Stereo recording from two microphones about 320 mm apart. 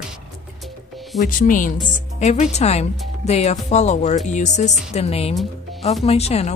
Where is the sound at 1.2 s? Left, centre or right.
Left.